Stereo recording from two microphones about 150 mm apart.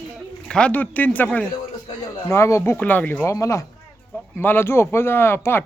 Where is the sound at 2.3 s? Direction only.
20° left (ahead or behind).